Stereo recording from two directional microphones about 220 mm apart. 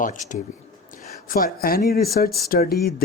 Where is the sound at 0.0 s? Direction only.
35° left (ahead or behind).